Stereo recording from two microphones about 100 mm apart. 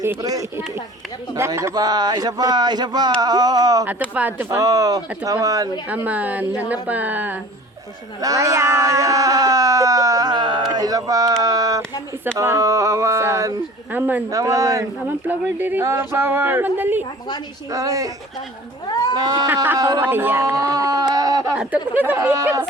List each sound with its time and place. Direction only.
0.2 s speech: 40° right (ahead or behind)
4.1 s a woman's voice: 15° right (ahead or behind)
4.4 s speech: 35° right (ahead or behind)
5.9 s a woman's voice: 15° right (ahead or behind)
8.2 s speech: 35° right (ahead or behind); by 14.3 s 20° right (ahead or behind)
14.3 s speech: 35° right (ahead or behind)
15.3 s speech: 20° right (ahead or behind)
17.7 s speech: 35° right (ahead or behind)
19.1 s speech: 45° right (ahead or behind)
20.0 s speech: 20° right (ahead or behind)
20.4 s speech: 30° right (ahead or behind)
21.9 s speech: 20° right (ahead or behind)